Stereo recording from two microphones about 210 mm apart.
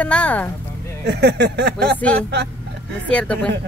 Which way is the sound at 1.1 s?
55° right (ahead or behind).